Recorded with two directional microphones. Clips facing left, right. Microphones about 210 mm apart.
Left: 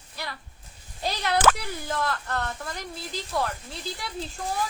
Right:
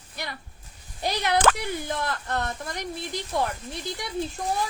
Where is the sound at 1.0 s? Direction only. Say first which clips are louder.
Right 2 dB; 20° right (ahead or behind).